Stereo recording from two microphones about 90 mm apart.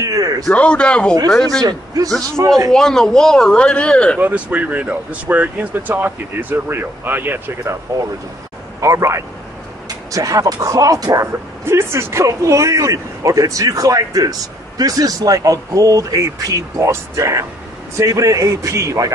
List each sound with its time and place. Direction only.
0.0 s a sound: 40° right (ahead or behind)
0.5 s speech: 15° left (ahead or behind)
1.6 s a man's voice: 45° right (ahead or behind)
2.7 s speech: 5° left (ahead or behind)
4.2 s speech: 15° right (ahead or behind)
8.8 s speech: 35° right (ahead or behind)